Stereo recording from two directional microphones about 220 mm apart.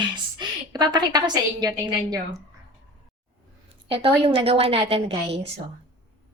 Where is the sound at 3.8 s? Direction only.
25° right (ahead or behind).